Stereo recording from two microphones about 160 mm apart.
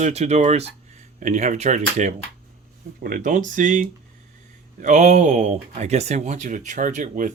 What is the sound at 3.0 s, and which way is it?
Speech, 60° right (ahead or behind).